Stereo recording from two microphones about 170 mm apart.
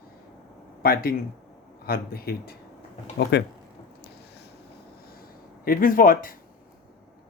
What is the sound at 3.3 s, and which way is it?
Speech, 80° left.